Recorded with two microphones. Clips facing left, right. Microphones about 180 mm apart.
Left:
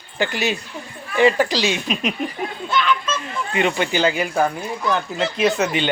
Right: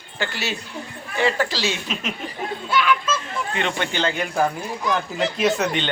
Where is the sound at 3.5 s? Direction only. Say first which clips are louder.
Left 6 dB; 10° left (ahead or behind).